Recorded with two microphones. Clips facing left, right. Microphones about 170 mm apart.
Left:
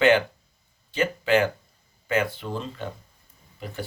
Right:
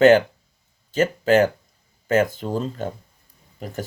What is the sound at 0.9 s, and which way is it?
Speech, 40° right (ahead or behind).